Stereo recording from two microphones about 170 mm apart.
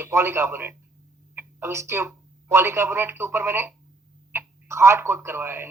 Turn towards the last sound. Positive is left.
turn(degrees=-15)  # may be behind; listen again after turning